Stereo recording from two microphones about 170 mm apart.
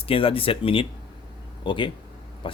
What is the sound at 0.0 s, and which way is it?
Speech, 30° left (ahead or behind).